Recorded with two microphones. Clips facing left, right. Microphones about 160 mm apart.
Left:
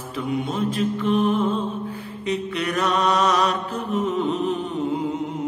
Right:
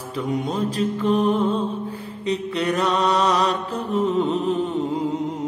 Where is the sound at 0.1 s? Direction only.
40° right (ahead or behind).